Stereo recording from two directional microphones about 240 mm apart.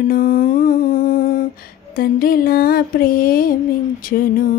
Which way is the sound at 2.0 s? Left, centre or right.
Left.